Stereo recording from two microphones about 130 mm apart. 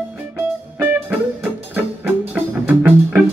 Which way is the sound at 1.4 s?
15° right (ahead or behind).